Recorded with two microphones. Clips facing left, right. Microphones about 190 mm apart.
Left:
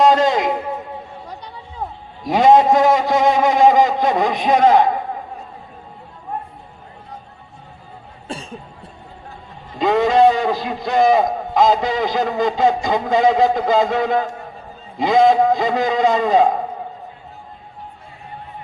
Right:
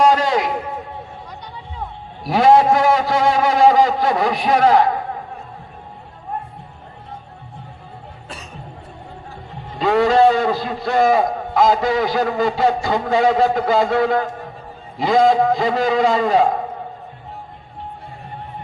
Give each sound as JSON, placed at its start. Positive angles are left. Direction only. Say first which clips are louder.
{"t": 0.0, "sound": "a man's voice", "louder": "left 1 dB", "side_deg": 20}
{"t": 2.2, "sound": "a man's voice", "louder": "left 1 dB", "side_deg": 20}
{"t": 8.3, "sound": "cough", "louder": "left 7 dB", "side_deg": 30}
{"t": 9.8, "sound": "a man's voice", "louder": "even", "side_deg": 15}